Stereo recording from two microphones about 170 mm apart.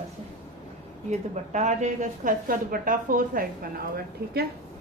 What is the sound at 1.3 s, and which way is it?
A woman's voice, 45° right (ahead or behind).